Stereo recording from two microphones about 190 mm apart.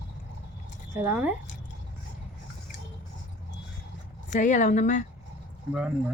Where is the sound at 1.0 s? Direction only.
10° right (ahead or behind).